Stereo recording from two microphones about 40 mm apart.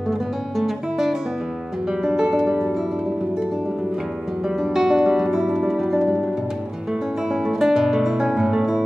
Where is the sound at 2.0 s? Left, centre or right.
Centre.